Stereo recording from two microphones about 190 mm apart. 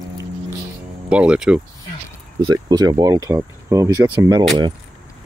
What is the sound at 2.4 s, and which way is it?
Speech, 20° right (ahead or behind).